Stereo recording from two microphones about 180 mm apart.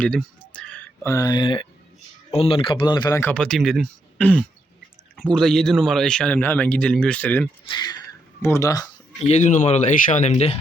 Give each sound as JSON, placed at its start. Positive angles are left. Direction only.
{"t": 0.0, "sound": "a man's voice", "side_deg": 5}
{"t": 7.7, "sound": "speech", "side_deg": 25}
{"t": 9.2, "sound": "speech", "side_deg": 40}